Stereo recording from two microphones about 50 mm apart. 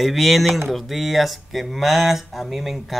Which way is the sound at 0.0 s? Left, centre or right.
Centre.